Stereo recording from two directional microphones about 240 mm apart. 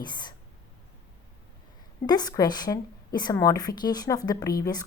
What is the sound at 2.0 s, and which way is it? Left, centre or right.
A woman's voice, centre.